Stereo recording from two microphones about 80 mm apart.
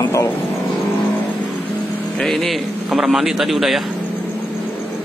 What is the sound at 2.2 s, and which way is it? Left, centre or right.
Speech, centre.